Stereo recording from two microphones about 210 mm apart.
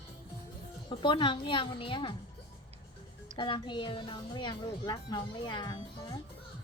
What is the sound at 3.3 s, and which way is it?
Speech, 20° left (ahead or behind).